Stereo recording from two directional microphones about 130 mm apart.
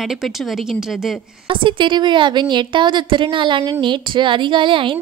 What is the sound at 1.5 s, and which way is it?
A woman's voice, 40° right (ahead or behind).